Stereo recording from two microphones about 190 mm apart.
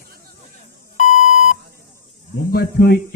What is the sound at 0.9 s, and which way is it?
Beep, 40° left (ahead or behind).